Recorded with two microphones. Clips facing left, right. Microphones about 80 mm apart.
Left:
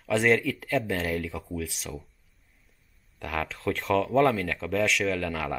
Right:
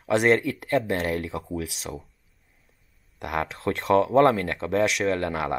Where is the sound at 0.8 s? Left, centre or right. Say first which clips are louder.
Right 3 dB; centre.